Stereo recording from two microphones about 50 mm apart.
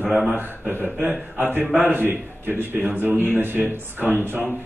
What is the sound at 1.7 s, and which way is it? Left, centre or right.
Speech, right.